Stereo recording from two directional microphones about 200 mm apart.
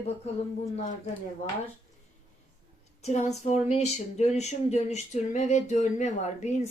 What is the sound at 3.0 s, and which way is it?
Speech, 35° left (ahead or behind).